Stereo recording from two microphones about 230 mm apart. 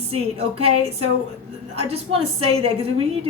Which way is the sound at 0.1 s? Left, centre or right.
Right.